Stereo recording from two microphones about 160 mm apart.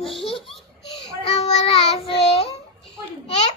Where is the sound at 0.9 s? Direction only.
35° left (ahead or behind).